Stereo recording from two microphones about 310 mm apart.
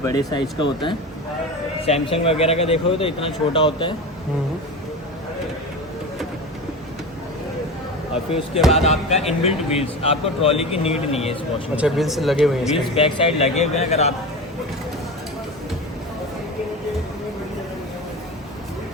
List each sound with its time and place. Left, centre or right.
0.0 s speech: centre
8.1 s speech: centre
11.8 s speech: centre
12.7 s speech: centre